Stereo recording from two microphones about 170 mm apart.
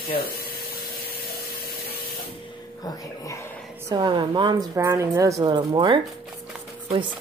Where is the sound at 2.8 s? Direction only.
20° left (ahead or behind).